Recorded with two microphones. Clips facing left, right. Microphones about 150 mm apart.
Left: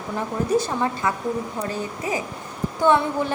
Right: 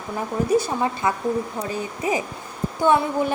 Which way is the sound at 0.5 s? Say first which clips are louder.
Right 1 dB; 10° right (ahead or behind).